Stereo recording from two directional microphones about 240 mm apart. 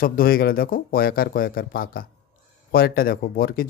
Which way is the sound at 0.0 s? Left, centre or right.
Left.